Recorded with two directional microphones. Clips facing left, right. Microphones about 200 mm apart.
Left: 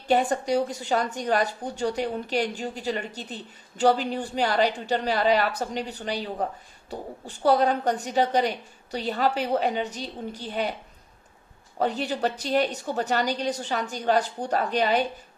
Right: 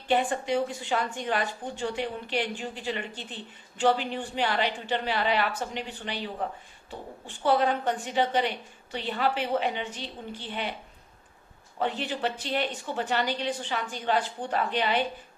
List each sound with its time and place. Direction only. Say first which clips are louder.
0.1 s a woman's voice: left 3 dB; 40° left (ahead or behind)
11.8 s a woman's voice: left 4 dB; 40° left (ahead or behind)